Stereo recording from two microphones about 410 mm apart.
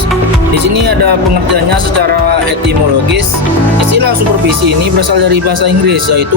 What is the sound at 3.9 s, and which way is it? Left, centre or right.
Speech, right.